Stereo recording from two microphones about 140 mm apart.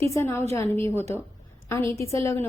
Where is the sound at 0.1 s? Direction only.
20° left (ahead or behind).